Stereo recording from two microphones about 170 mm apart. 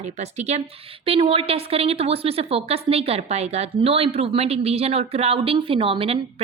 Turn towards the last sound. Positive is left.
turn(degrees=-35)  # may be behind; listen again after turning